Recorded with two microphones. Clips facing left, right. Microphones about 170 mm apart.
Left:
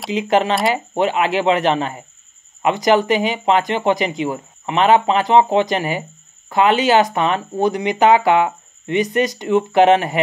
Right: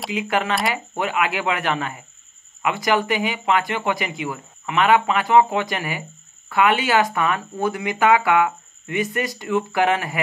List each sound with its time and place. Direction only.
0.1 s speech: 25° left (ahead or behind)